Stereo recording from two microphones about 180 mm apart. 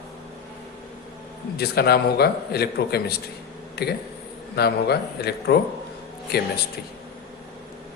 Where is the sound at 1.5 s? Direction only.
60° left (ahead or behind).